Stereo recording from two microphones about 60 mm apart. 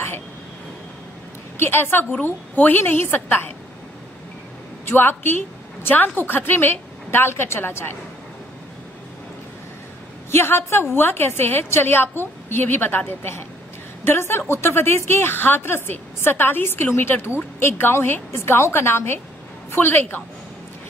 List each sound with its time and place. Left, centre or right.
1.6 s a woman's voice: left
4.8 s a woman's voice: left
10.3 s a woman's voice: left
19.7 s a woman's voice: left